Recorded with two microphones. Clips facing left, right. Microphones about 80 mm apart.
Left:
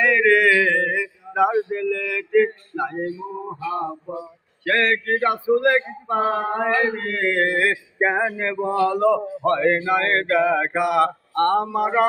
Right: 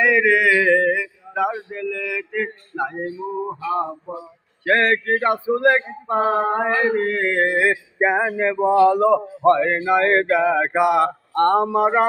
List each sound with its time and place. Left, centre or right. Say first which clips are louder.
0.0 s mantra: even; centre
1.3 s speech: left 3 dB; centre
1.7 s mantra: left 2 dB; centre
4.1 s a sound: left 1 dB; centre
4.6 s a sound: right 2 dB; right
9.6 s mantra: right 1 dB; centre; by 12.0 s right